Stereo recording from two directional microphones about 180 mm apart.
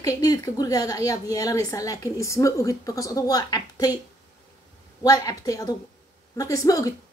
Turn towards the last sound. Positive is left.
turn(degrees=20)  # may be behind; listen again after turning